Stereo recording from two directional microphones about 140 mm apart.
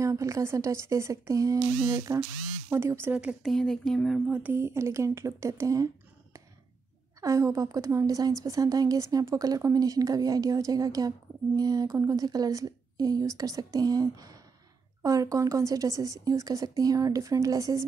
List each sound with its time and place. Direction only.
0.0 s a woman's voice: 20° right (ahead or behind)
3.4 s speech: 5° left (ahead or behind)
4.3 s a woman's voice: 15° right (ahead or behind)
7.2 s a woman's voice: 20° right (ahead or behind)